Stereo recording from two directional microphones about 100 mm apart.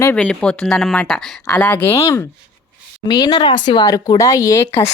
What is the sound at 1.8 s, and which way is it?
Speech, 35° left (ahead or behind).